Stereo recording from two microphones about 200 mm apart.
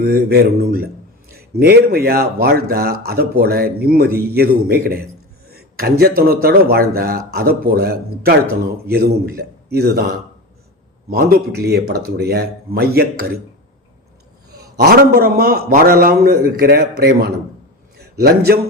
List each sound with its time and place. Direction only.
0.0 s speech: 50° right (ahead or behind)
11.1 s speech: 50° right (ahead or behind)
14.8 s a man's voice: 50° right (ahead or behind)